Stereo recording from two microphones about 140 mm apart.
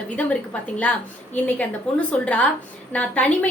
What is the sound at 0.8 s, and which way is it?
A woman's voice, 10° left (ahead or behind).